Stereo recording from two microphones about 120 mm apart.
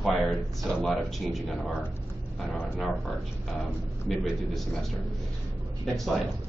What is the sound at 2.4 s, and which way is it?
Speech, 10° right (ahead or behind).